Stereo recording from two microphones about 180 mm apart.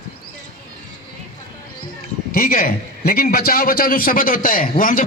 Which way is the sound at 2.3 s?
55° left (ahead or behind).